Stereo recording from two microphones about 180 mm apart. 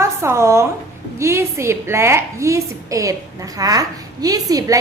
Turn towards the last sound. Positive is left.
turn(degrees=-20)  # may be behind; listen again after turning